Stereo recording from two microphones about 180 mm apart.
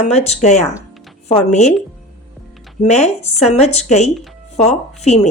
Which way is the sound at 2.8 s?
40° left (ahead or behind).